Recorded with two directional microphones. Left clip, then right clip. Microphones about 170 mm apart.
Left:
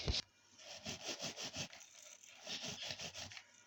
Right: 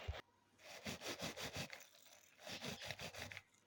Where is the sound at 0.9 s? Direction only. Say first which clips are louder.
Left 2 dB; 5° right (ahead or behind).